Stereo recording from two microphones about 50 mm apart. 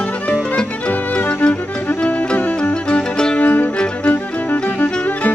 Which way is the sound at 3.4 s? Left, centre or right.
Left.